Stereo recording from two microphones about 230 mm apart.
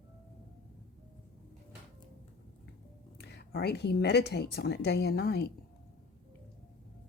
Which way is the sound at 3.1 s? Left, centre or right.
Left.